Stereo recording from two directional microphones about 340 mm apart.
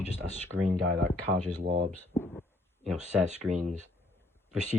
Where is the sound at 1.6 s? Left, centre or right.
Centre.